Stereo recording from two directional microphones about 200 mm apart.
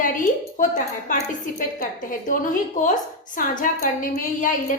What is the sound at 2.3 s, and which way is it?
A woman's voice, 40° left (ahead or behind).